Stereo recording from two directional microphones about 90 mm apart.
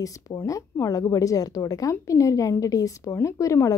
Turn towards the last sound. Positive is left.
turn(degrees=35)  # may be behind; listen again after turning